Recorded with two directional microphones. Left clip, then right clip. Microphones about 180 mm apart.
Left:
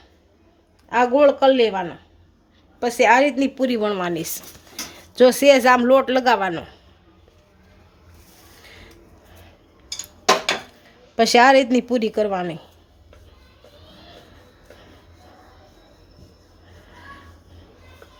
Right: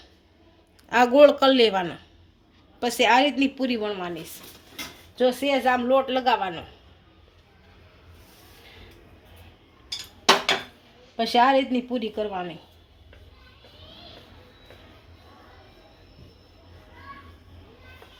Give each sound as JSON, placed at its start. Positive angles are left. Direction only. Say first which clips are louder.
{"t": 0.9, "sound": "a woman's voice", "louder": "even", "side_deg": -5}
{"t": 2.8, "sound": "a woman's voice", "louder": "left 4 dB", "side_deg": 20}
{"t": 5.1, "sound": "speech", "louder": "left 10 dB", "side_deg": 60}
{"t": 11.2, "sound": "speech", "louder": "left 6 dB", "side_deg": 50}